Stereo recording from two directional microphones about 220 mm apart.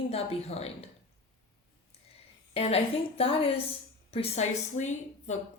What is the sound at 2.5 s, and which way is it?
A woman's voice, 25° left (ahead or behind).